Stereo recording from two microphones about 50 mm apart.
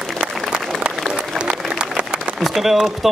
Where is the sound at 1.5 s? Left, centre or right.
Right.